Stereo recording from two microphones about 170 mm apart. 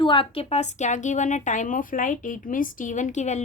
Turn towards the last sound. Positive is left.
turn(degrees=45)  # may be behind; listen again after turning